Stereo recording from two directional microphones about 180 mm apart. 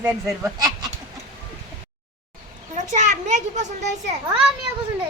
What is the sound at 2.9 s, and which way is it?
Speech, 40° right (ahead or behind).